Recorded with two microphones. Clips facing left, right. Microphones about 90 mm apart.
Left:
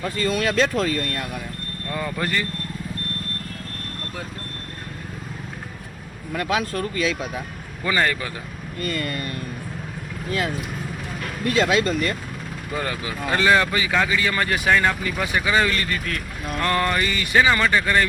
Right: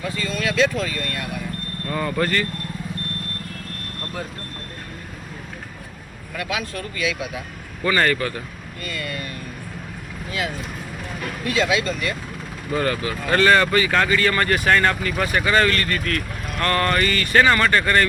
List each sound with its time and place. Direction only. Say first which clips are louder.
0.1 s speech: left 4 dB; 50° left (ahead or behind)
1.9 s speech: right 3 dB; 5° left (ahead or behind)
6.3 s speech: left 4 dB; 40° left (ahead or behind)
7.9 s speech: right 3 dB; 5° left (ahead or behind)
8.8 s speech: left 3 dB; 45° left (ahead or behind)
11.4 s speech: left 2 dB; 45° left (ahead or behind)
12.7 s speech: right 5 dB; 5° left (ahead or behind)